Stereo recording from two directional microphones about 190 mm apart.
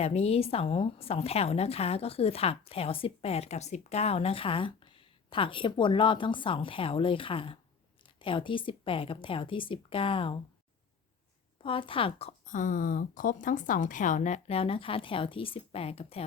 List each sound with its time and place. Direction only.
0.0 s a woman's voice: 35° left (ahead or behind)
11.6 s a woman's voice: 30° left (ahead or behind)
12.5 s a woman's voice: 45° left (ahead or behind)